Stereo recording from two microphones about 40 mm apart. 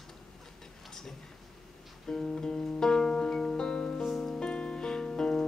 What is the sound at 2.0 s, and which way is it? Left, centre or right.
Music, centre.